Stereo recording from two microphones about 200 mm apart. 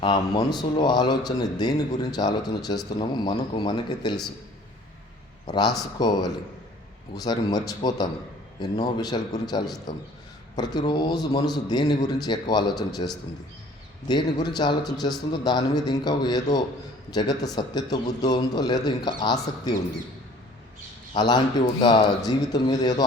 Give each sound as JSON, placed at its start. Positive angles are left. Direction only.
{"t": 0.0, "sound": "a man's voice", "side_deg": 20}
{"t": 5.5, "sound": "a man's voice", "side_deg": 20}
{"t": 7.2, "sound": "a man's voice", "side_deg": 20}
{"t": 14.1, "sound": "a man's voice", "side_deg": 20}
{"t": 21.1, "sound": "a man's voice", "side_deg": 20}